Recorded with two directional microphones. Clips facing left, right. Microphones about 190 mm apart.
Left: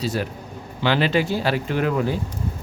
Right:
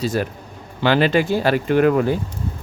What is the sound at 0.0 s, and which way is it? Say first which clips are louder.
Speech: right 3 dB; 50° right (ahead or behind).